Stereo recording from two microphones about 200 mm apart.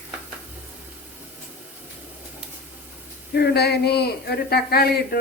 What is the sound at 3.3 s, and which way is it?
Speech, 55° left (ahead or behind).